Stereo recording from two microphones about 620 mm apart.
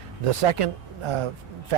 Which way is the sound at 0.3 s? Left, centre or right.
Right.